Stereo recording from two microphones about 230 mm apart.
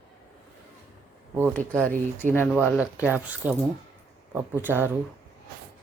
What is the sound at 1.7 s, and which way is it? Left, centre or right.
Speech, centre.